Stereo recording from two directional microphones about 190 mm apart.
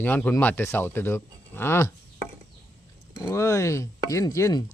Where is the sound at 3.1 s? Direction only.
15° left (ahead or behind).